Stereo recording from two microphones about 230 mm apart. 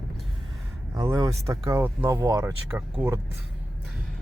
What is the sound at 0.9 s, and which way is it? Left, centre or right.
Speech, centre.